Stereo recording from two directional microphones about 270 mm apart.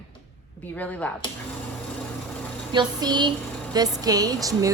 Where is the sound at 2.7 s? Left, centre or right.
Centre.